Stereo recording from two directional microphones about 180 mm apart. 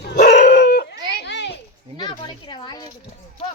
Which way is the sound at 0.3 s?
70° left (ahead or behind).